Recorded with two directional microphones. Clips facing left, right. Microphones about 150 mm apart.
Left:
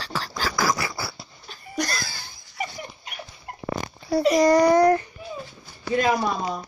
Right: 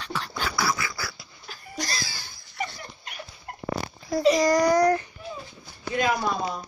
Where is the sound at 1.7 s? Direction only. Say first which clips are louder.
Left 5 dB; 55° left (ahead or behind).